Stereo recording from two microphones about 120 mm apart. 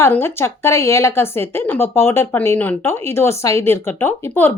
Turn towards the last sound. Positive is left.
turn(degrees=20)  # may be behind; listen again after turning